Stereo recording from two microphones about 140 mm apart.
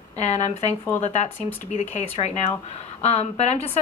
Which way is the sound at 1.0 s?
50° left (ahead or behind).